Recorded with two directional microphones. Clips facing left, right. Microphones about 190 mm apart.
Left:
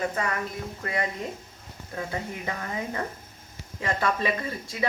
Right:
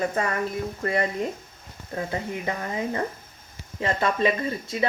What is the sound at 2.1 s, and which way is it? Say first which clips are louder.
Speech: right 4 dB; 20° right (ahead or behind).